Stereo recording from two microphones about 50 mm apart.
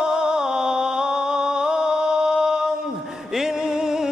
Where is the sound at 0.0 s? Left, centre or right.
Centre.